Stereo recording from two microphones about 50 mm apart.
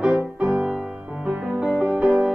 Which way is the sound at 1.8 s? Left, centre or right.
Right.